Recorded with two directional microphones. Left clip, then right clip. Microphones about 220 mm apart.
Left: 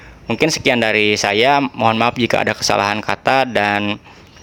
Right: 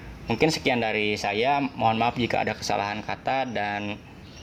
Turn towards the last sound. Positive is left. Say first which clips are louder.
# left 12 dB
turn(degrees=45)  # may be behind; listen again after turning